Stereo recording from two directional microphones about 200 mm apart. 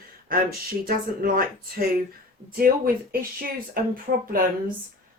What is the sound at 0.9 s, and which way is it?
Speech, 45° right (ahead or behind).